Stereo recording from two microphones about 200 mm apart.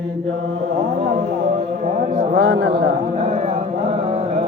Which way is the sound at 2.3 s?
85° right.